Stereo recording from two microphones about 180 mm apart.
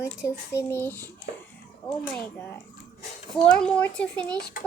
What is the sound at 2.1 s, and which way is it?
A child's voice, 10° left (ahead or behind).